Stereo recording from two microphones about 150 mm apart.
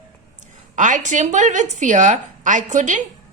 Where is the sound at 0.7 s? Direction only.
55° right (ahead or behind).